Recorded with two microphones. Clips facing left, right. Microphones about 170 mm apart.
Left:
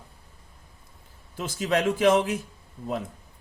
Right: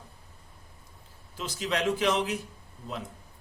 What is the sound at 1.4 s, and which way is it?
Speech, 45° left (ahead or behind).